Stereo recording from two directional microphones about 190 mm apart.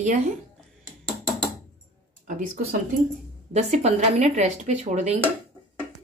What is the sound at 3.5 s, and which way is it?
Speech, 35° right (ahead or behind).